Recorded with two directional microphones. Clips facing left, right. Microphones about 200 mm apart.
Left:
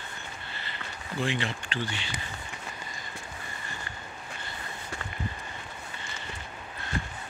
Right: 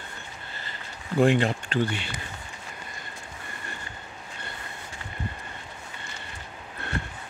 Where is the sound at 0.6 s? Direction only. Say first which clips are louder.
Even; 50° right (ahead or behind).